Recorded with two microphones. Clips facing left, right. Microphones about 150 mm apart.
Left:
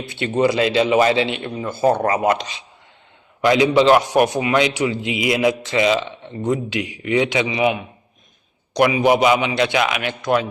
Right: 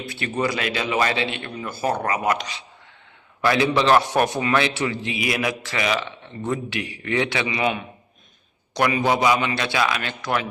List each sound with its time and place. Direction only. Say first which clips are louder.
0.1 s a man's voice: left 7 dB; 25° left (ahead or behind)
8.7 s a man's voice: left 5 dB; 15° left (ahead or behind)